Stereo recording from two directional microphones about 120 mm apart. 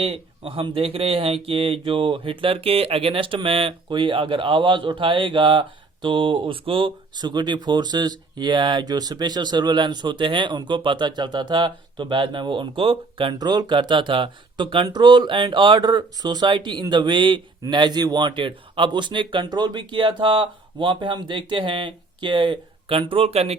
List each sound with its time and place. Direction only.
0.0 s speech: 50° right (ahead or behind)